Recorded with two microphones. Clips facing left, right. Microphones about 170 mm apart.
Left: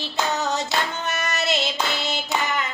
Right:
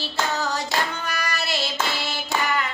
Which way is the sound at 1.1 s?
25° left (ahead or behind).